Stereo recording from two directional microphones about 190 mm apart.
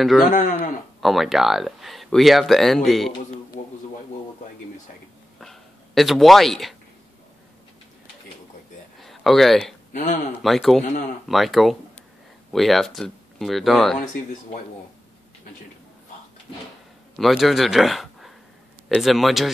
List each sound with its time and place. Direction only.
0.0 s speech: centre (ahead or behind)
5.4 s a sound: centre (ahead or behind)
9.0 s speech: centre (ahead or behind)
9.9 s speech: 40° left (ahead or behind)
10.4 s speech: centre (ahead or behind)
10.8 s speech: 40° left (ahead or behind)
11.2 s speech: centre (ahead or behind)
17.2 s speech: centre (ahead or behind)